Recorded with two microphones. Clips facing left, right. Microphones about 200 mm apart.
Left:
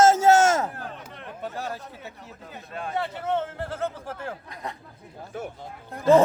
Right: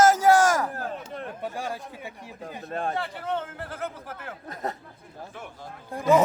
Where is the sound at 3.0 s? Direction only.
20° left (ahead or behind).